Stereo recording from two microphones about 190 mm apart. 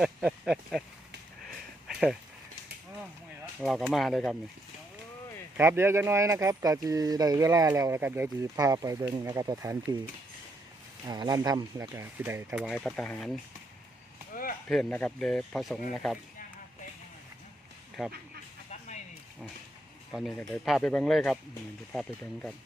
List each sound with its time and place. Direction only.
0.0 s speech: 5° right (ahead or behind)
1.9 s a sound: centre (ahead or behind)
3.6 s speech: centre (ahead or behind)
5.5 s speech: 10° right (ahead or behind)
11.1 s speech: 20° right (ahead or behind); by 13.3 s 5° left (ahead or behind)
14.3 s a sound: 50° left (ahead or behind)
14.7 s speech: 5° left (ahead or behind)
18.0 s speech: centre (ahead or behind)
20.1 s speech: centre (ahead or behind)